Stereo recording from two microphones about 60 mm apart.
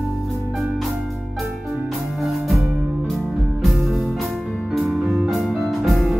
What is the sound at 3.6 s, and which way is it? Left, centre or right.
Music, centre.